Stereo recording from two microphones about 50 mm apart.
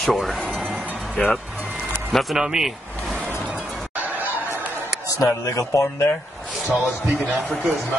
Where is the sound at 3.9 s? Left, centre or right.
Right.